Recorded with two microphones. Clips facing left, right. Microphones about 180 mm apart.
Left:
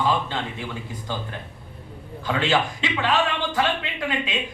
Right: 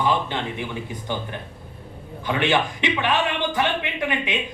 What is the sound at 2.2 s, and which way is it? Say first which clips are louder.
Speech: right 1 dB; 20° right (ahead or behind).